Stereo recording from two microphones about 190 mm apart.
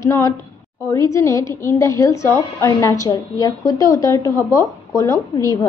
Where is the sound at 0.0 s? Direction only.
15° left (ahead or behind).